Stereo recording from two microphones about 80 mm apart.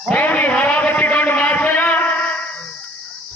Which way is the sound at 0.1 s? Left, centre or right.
Centre.